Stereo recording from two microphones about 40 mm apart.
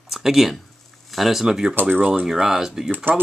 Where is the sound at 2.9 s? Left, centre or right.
Right.